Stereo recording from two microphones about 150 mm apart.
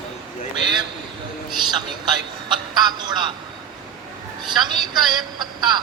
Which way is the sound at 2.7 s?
30° right (ahead or behind).